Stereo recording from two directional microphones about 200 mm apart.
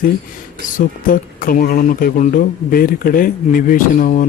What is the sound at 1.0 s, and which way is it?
Speech, 45° left (ahead or behind).